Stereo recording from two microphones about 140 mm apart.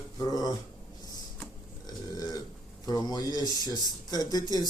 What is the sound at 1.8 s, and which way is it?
Burping, 25° left (ahead or behind).